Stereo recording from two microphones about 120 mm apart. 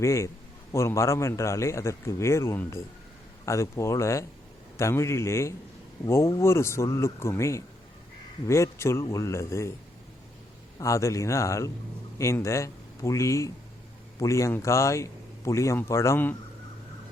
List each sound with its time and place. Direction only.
0.0 s speech: 25° left (ahead or behind)
10.8 s speech: 25° left (ahead or behind)